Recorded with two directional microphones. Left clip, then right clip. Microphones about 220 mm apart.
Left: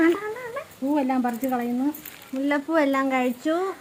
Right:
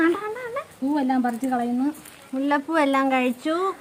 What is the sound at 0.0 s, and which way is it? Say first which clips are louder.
Dog: even; 10° right (ahead or behind).